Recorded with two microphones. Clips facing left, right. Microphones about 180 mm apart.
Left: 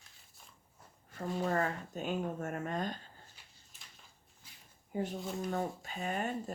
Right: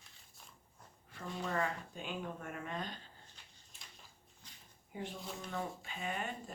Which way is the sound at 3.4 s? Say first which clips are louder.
Even; 5° left (ahead or behind).